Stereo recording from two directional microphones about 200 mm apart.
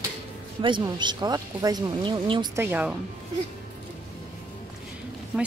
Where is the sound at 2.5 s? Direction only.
10° right (ahead or behind).